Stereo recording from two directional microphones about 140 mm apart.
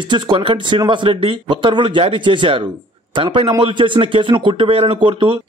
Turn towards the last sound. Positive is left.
turn(degrees=-35)  # may be behind; listen again after turning